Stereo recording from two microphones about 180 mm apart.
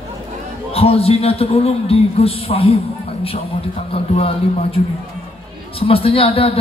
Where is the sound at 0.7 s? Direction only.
35° left (ahead or behind).